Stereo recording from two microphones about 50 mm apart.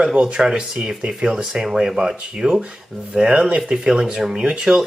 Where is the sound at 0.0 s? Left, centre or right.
Centre.